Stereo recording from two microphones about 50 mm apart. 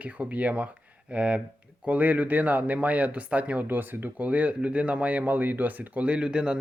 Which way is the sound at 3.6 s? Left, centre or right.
Right.